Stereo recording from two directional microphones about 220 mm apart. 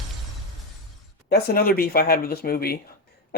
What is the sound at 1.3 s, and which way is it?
Speech, 45° left (ahead or behind).